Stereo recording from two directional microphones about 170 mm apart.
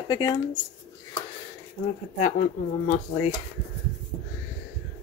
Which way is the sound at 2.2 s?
50° left (ahead or behind).